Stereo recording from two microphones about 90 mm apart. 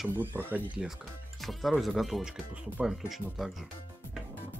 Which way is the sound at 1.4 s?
Centre (ahead or behind).